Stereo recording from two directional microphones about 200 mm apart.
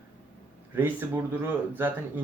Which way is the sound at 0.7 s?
10° right (ahead or behind).